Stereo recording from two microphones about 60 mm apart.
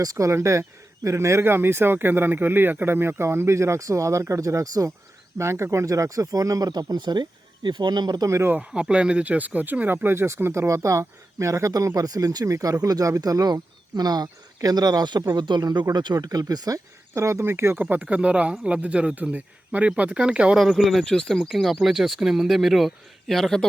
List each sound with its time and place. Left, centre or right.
0.0 s speech: right
0.3 s speech: right
5.4 s speech: right
8.2 s speech: right
8.7 s speech: centre; by 11.9 s right
11.9 s speech: right
14.0 s speech: right
17.2 s speech: right
17.4 s speech: right
17.7 s speech: right
20.6 s speech: centre
21.5 s speech: centre